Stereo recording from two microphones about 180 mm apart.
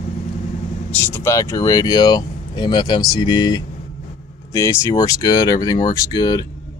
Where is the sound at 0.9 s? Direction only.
10° left (ahead or behind).